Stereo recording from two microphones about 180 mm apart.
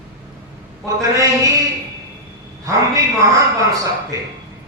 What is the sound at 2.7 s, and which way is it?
A man's voice, 20° right (ahead or behind).